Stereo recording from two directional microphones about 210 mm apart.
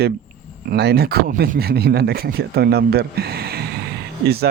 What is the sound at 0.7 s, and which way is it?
Speech, 50° right (ahead or behind).